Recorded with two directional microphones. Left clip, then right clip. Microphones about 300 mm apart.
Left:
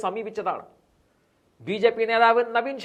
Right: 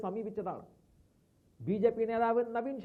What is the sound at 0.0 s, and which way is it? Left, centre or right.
Speech, centre.